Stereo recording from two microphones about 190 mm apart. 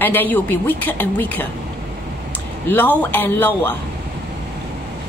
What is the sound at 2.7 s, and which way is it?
A woman's voice, 10° left (ahead or behind).